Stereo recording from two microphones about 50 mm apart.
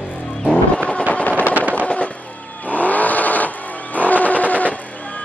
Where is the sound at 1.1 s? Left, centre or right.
Left.